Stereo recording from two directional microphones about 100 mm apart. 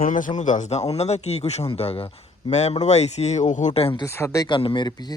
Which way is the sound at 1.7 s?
75° left (ahead or behind).